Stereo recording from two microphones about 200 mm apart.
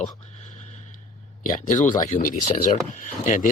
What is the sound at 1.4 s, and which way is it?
Speech, 40° left (ahead or behind).